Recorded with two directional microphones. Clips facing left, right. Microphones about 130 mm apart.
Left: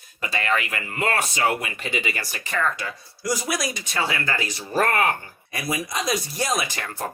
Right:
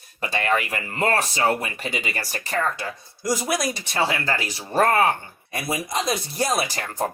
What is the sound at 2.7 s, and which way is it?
Speech, 25° right (ahead or behind).